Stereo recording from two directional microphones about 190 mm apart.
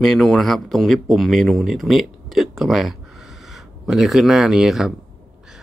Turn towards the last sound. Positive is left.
turn(degrees=0)  # may be behind; listen again after turning